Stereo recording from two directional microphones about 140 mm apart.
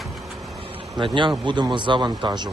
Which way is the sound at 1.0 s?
35° right (ahead or behind).